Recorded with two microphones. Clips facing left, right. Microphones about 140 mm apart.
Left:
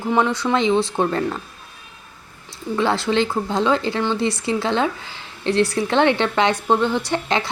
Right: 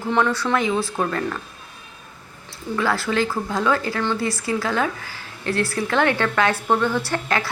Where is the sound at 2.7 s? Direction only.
25° left (ahead or behind).